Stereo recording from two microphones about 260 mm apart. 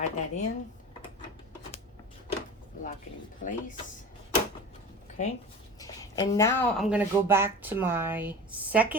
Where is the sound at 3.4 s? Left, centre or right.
Left.